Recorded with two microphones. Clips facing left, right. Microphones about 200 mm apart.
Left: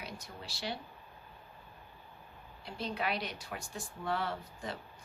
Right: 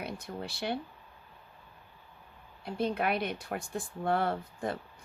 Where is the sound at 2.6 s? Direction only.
55° right (ahead or behind).